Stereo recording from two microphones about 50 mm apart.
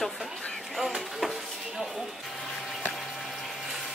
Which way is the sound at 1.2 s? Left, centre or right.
Centre.